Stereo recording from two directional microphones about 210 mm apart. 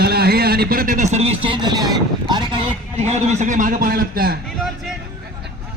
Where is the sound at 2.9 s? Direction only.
30° right (ahead or behind).